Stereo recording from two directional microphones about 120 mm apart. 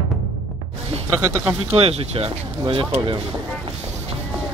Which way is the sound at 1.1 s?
20° right (ahead or behind).